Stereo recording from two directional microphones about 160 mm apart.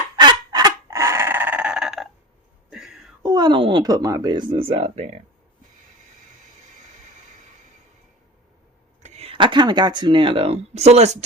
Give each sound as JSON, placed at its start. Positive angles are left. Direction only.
{"t": 0.2, "sound": "fowl", "side_deg": -25}
{"t": 2.6, "sound": "a sound", "side_deg": -5}
{"t": 3.2, "sound": "speech", "side_deg": -25}
{"t": 9.0, "sound": "speech", "side_deg": -40}